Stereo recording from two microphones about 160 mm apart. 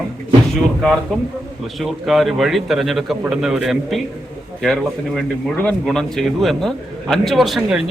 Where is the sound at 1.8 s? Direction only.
Centre (ahead or behind).